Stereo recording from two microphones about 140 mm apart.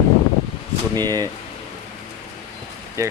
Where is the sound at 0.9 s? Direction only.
30° right (ahead or behind).